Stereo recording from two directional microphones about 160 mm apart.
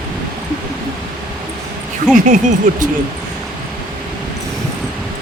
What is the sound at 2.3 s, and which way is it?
Speech, 55° right (ahead or behind).